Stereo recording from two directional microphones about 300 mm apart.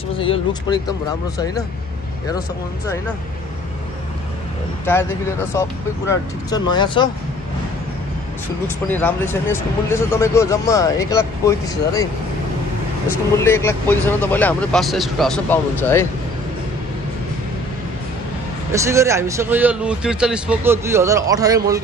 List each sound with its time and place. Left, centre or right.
0.2 s speech: centre
4.9 s speech: centre
8.6 s speech: centre
13.4 s speech: centre
18.7 s a man's voice: centre